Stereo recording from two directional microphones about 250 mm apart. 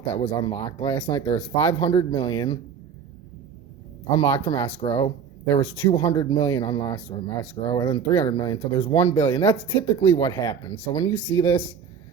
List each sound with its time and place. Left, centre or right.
0.0 s speech: left
4.2 s speech: left